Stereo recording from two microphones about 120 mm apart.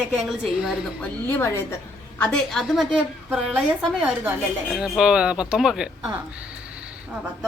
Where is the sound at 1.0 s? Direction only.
20° left (ahead or behind).